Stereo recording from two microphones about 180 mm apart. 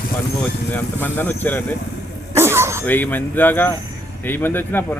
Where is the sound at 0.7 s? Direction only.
10° left (ahead or behind).